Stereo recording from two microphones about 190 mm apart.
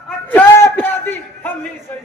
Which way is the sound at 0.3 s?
10° left (ahead or behind).